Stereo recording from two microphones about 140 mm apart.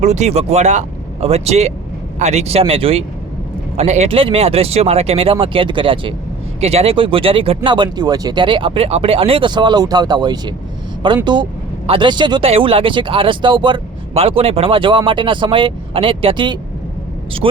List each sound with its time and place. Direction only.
0.0 s speech: 55° right (ahead or behind); by 17.6 s 40° right (ahead or behind)